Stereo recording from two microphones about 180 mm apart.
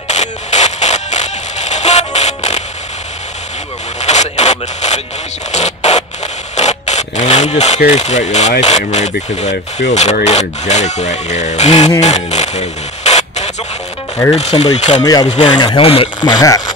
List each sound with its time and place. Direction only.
0.1 s a sound: 40° left (ahead or behind)
4.0 s zipper: 40° left (ahead or behind)
5.5 s scratch: 40° left (ahead or behind)
6.5 s speech: 40° left (ahead or behind)
12.0 s a sound: 40° left (ahead or behind)
14.3 s speech: 35° left (ahead or behind)
15.0 s speech: 20° left (ahead or behind)